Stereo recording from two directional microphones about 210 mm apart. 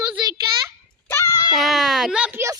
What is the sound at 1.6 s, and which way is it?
Speech, centre (ahead or behind).